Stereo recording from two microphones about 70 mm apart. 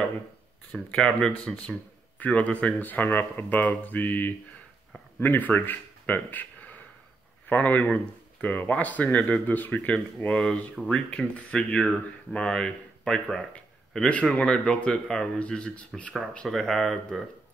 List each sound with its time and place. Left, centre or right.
0.7 s speech: centre
10.2 s speech: centre
16.4 s speech: centre